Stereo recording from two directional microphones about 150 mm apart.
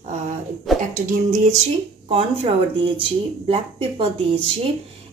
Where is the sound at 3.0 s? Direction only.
40° right (ahead or behind).